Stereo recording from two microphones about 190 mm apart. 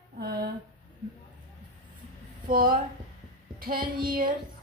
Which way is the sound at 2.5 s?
50° right (ahead or behind).